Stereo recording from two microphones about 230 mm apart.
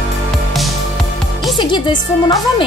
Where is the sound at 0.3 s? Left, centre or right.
Centre.